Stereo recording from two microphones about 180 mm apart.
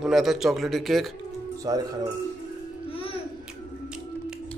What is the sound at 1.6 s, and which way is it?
Speech, 20° right (ahead or behind).